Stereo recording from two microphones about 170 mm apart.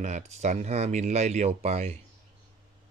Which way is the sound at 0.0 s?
45° right (ahead or behind).